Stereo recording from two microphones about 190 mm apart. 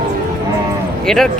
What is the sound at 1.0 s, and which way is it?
Speech, centre (ahead or behind).